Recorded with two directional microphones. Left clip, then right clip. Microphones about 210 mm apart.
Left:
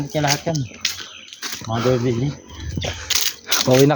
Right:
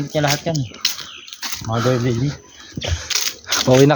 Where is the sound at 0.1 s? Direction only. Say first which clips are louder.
Right 1 dB; 15° right (ahead or behind).